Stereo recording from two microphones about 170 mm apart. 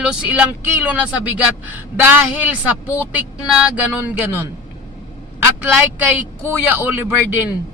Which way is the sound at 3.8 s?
10° right (ahead or behind).